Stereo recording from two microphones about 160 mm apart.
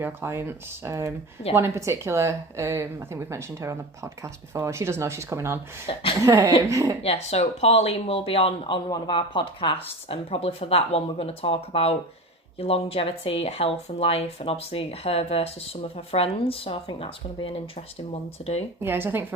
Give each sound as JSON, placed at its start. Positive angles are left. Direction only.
{"t": 0.0, "sound": "speech", "side_deg": -15}
{"t": 5.9, "sound": "speech", "side_deg": 35}
{"t": 6.2, "sound": "speech", "side_deg": -20}
{"t": 7.0, "sound": "speech", "side_deg": 40}
{"t": 18.8, "sound": "speech", "side_deg": -15}